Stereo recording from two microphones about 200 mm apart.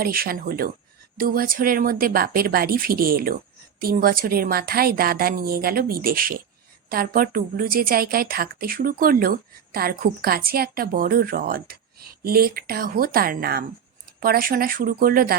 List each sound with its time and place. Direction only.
0.0 s speech: 50° right (ahead or behind)